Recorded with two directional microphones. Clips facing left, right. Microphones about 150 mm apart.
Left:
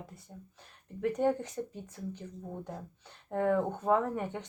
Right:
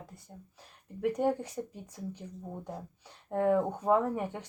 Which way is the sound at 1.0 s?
10° right (ahead or behind).